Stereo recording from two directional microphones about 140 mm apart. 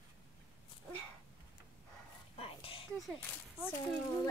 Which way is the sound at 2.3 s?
45° left (ahead or behind).